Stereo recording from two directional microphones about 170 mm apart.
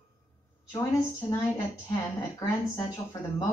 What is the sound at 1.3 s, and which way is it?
Speech, 20° left (ahead or behind).